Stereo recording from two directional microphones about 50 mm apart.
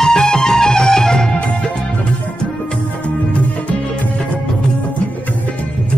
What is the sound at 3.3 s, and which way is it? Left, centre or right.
Music, left.